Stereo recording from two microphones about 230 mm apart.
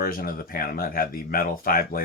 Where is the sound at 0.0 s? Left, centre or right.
Left.